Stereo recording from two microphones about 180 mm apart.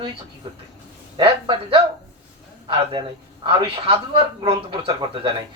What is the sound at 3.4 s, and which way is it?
A man's voice, 30° right (ahead or behind).